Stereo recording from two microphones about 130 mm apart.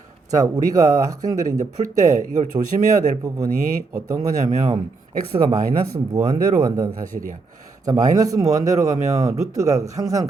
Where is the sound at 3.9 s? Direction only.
25° right (ahead or behind).